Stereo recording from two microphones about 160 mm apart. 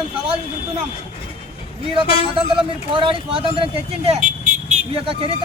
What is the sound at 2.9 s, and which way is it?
Speech, 35° right (ahead or behind).